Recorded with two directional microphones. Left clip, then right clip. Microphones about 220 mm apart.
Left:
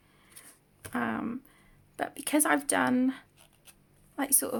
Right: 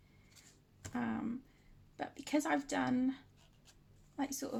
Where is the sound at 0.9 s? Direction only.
35° left (ahead or behind).